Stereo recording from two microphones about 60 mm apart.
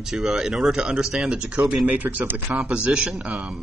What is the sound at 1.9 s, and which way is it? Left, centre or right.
Speech, right.